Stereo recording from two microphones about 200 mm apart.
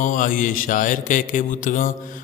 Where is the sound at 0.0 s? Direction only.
40° left (ahead or behind).